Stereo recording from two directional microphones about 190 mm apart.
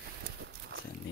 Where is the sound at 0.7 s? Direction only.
85° right.